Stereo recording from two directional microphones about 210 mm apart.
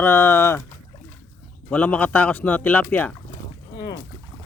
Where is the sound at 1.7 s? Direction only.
5° left (ahead or behind).